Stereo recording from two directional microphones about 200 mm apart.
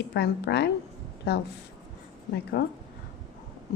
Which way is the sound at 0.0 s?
55° left (ahead or behind).